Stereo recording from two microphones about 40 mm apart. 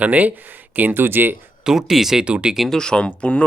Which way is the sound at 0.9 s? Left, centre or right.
Right.